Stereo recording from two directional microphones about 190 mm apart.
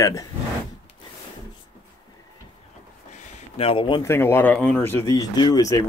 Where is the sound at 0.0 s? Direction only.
15° left (ahead or behind).